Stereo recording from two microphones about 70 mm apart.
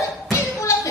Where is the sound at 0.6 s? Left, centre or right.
Left.